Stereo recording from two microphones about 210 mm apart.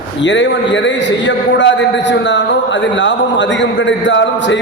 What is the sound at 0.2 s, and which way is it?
A man's voice, 60° left (ahead or behind).